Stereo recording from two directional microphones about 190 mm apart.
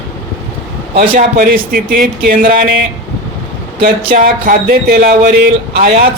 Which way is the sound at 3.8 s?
45° right (ahead or behind).